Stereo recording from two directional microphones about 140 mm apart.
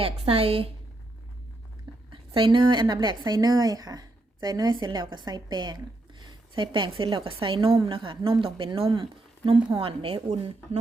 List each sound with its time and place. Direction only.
0.0 s a woman's voice: 45° right (ahead or behind)
2.0 s a woman's voice: 35° right (ahead or behind)